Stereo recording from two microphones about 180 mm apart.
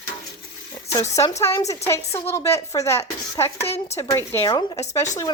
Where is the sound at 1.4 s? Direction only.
15° left (ahead or behind).